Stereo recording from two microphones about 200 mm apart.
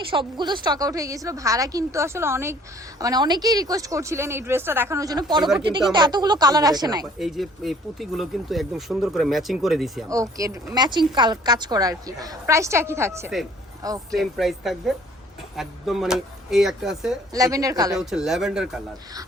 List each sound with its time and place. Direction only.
0.1 s a woman's voice: 25° right (ahead or behind)
7.2 s speech: centre (ahead or behind)
10.1 s a woman's voice: 15° right (ahead or behind)
14.1 s speech: centre (ahead or behind)
17.3 s speech: 15° right (ahead or behind)
17.9 s speech: centre (ahead or behind)